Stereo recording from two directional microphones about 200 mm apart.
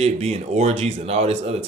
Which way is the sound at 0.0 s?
35° right (ahead or behind).